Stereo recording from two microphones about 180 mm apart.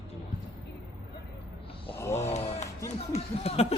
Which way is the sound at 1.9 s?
15° left (ahead or behind).